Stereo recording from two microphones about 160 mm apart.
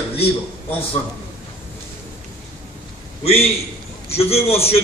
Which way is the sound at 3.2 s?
40° left (ahead or behind).